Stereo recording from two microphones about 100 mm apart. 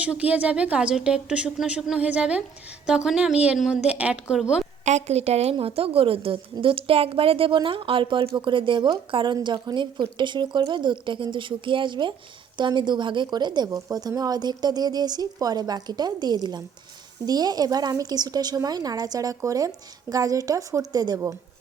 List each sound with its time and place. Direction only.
0.0 s a woman's voice: 15° right (ahead or behind)
5.0 s a woman's voice: 90° right
5.5 s a woman's voice: 70° right (ahead or behind); by 13.7 s 45° right (ahead or behind)
13.7 s speech: 30° right (ahead or behind)